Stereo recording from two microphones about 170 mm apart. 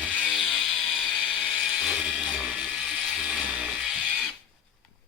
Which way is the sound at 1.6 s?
Centre (ahead or behind).